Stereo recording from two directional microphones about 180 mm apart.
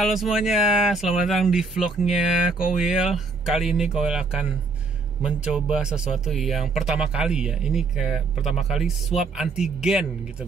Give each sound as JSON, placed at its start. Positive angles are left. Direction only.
{"t": 0.0, "sound": "speech", "side_deg": 0}